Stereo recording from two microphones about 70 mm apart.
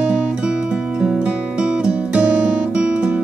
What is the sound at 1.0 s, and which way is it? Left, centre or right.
Music, centre.